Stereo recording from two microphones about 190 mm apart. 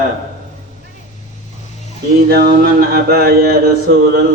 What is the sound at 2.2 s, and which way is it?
Mantra, 55° right (ahead or behind).